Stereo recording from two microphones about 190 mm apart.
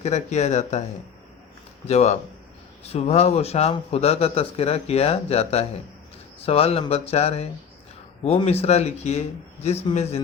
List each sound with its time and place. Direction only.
0.0 s speech: 35° left (ahead or behind)
1.9 s speech: 35° left (ahead or behind)